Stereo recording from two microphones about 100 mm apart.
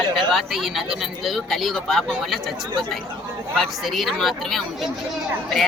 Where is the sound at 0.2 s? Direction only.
5° right (ahead or behind).